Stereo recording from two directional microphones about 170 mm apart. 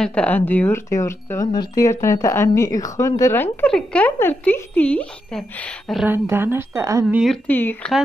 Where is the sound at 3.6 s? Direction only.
5° left (ahead or behind).